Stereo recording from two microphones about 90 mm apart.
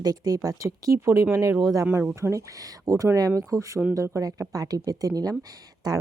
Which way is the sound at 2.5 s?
40° right (ahead or behind).